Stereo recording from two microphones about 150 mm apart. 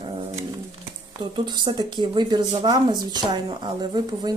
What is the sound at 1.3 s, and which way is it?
Speech, 30° right (ahead or behind).